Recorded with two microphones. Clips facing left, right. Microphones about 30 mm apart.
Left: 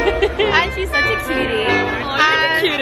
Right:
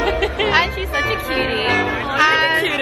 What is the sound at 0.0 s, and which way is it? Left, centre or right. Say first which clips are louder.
Music: left 2 dB; centre.